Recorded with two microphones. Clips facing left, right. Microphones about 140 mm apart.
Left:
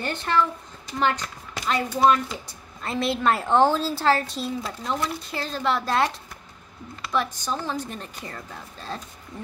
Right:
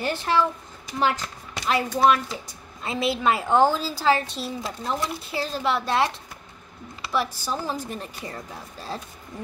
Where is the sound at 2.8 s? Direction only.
5° right (ahead or behind).